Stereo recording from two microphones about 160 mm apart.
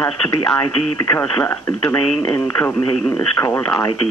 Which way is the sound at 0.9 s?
15° left (ahead or behind).